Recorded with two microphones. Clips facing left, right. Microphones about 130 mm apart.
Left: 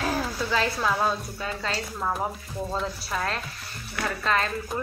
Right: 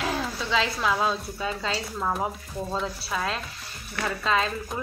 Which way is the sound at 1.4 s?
5° right (ahead or behind).